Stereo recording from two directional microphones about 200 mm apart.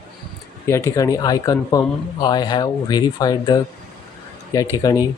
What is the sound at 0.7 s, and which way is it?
Speech, 15° left (ahead or behind).